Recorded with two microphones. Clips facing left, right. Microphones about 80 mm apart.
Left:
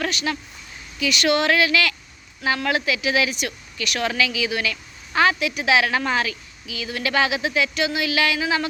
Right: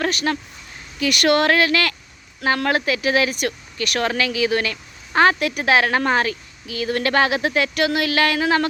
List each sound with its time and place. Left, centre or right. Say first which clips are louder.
0.0 s speech: right 4 dB; right